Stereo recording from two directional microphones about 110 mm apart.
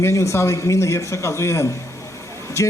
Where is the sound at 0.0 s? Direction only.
25° left (ahead or behind).